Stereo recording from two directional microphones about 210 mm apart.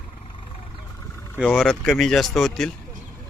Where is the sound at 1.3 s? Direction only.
Centre (ahead or behind).